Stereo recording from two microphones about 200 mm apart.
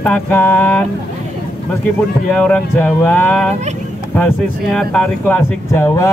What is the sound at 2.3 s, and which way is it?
Speech, 5° left (ahead or behind).